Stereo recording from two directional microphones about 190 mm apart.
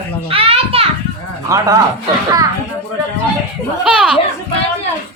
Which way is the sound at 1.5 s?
15° right (ahead or behind).